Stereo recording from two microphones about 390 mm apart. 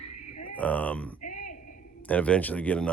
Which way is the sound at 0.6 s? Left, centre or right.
Centre.